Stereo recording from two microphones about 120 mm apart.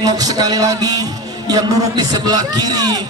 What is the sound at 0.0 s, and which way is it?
A man's voice, 30° right (ahead or behind).